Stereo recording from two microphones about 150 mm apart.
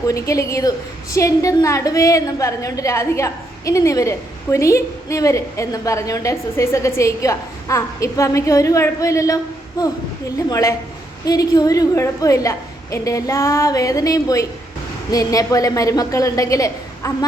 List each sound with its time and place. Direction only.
0.1 s a woman's voice: 20° left (ahead or behind)